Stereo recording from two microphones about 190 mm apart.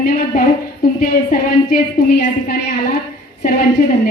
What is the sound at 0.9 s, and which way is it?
Speech, 45° left (ahead or behind).